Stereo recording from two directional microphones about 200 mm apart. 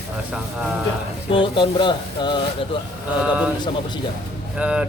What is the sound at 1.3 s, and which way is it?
Speech, 25° left (ahead or behind).